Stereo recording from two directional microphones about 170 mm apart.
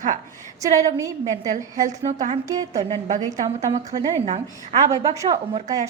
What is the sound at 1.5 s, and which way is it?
Speech, 45° right (ahead or behind).